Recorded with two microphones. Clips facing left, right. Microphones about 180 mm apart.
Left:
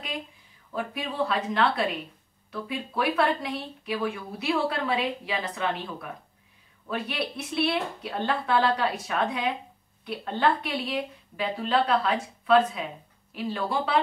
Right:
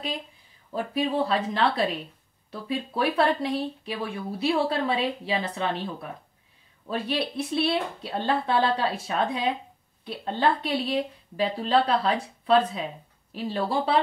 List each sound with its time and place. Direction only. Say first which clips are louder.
0.7 s speech: right 5 dB; 30° right (ahead or behind)